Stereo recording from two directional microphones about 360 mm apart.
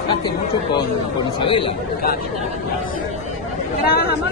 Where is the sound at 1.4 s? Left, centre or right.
Centre.